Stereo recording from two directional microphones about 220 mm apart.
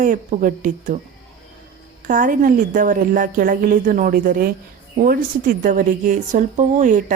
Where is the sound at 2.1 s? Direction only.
40° right (ahead or behind).